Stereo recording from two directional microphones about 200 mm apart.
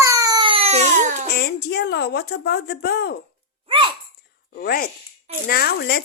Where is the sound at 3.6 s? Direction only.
25° right (ahead or behind).